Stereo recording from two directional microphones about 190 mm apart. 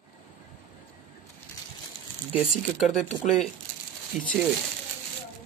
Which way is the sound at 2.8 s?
5° left (ahead or behind).